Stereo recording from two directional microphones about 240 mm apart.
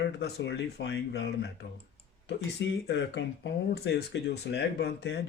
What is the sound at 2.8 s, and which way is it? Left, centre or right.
Speech, left.